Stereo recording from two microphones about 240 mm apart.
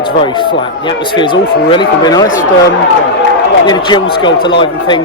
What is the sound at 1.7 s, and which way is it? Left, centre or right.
Speech, centre.